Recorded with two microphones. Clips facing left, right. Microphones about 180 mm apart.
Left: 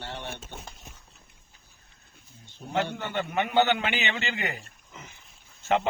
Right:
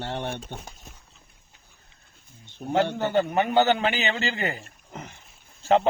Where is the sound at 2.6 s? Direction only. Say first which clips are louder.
Right 10 dB; 60° right (ahead or behind).